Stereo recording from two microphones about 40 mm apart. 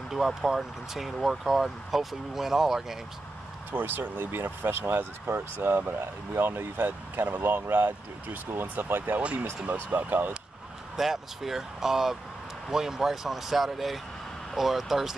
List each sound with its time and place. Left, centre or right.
0.1 s speech: centre
3.7 s speech: right
7.4 s speech: right
11.0 s speech: centre